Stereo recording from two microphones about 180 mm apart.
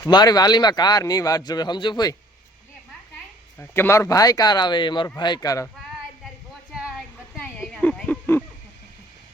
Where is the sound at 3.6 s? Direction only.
15° left (ahead or behind).